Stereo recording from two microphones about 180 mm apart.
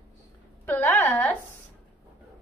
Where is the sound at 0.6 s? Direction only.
10° left (ahead or behind).